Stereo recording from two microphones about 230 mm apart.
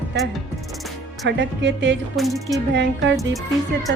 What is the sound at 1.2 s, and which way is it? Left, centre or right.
Speech, right.